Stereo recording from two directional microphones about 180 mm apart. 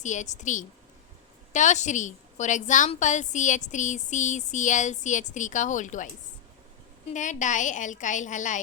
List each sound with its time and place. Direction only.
0.0 s a woman's voice: 40° left (ahead or behind)
7.1 s a woman's voice: 45° left (ahead or behind)